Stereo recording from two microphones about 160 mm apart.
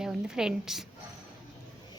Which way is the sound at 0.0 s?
5° right (ahead or behind).